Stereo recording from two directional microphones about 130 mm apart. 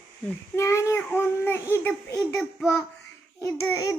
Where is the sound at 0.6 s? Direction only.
20° left (ahead or behind).